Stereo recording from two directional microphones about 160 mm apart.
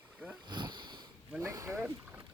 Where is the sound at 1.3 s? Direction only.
20° right (ahead or behind).